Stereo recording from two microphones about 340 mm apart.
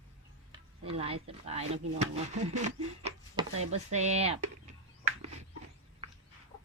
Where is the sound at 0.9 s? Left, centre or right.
Centre.